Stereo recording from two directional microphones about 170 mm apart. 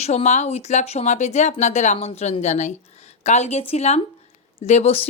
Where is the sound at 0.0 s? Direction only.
40° left (ahead or behind).